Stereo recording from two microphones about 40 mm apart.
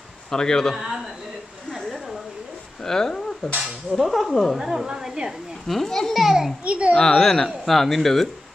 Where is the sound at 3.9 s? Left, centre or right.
Centre.